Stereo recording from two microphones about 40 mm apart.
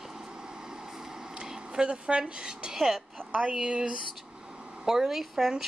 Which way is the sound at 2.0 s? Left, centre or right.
Right.